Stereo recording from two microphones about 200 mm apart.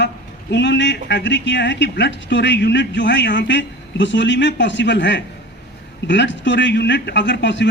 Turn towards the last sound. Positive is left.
turn(degrees=65)  # may be behind; listen again after turning